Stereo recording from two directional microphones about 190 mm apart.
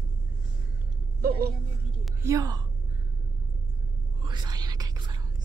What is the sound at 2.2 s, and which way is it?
Speech, 15° right (ahead or behind).